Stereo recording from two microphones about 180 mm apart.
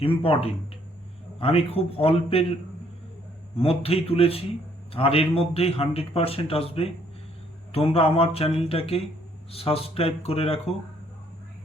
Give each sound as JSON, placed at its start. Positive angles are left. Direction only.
{"t": 0.0, "sound": "a man's voice", "side_deg": 30}
{"t": 3.6, "sound": "a man's voice", "side_deg": 35}